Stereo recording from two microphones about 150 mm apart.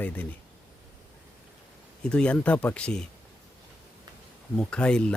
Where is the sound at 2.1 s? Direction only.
5° left (ahead or behind).